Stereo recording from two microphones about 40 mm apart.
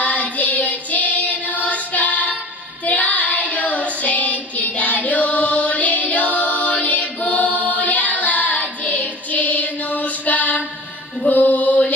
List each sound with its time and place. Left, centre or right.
0.0 s child singing: left
11.2 s mantra: left